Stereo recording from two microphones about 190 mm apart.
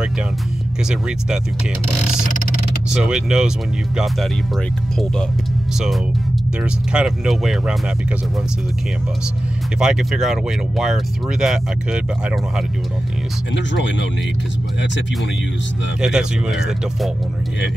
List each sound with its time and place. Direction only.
2.9 s speech: 5° right (ahead or behind)
6.6 s speech: 5° right (ahead or behind)
9.8 s speech: 5° right (ahead or behind)
13.6 s speech: 70° left (ahead or behind)
16.0 s speech: 5° right (ahead or behind)